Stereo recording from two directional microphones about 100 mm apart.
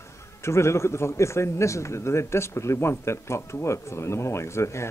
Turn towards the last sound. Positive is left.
turn(degrees=30)  # may be behind; listen again after turning